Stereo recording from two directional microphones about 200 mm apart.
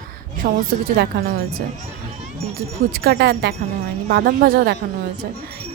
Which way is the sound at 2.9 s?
50° right (ahead or behind).